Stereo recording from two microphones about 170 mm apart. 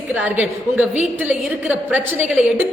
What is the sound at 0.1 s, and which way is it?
A woman's voice, 10° right (ahead or behind).